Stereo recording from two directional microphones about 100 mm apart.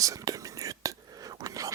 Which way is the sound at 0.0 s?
35° right (ahead or behind).